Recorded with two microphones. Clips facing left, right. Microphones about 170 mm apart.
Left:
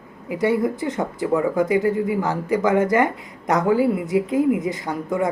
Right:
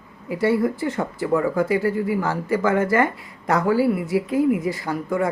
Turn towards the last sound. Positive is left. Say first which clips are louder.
# even
turn(degrees=20)  # may be behind; listen again after turning